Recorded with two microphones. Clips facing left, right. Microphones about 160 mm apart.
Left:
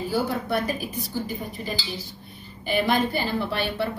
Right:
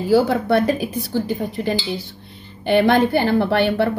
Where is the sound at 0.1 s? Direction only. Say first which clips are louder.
Right 11 dB; 75° right (ahead or behind).